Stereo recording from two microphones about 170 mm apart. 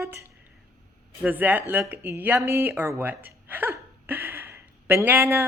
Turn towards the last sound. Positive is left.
turn(degrees=-15)  # may be behind; listen again after turning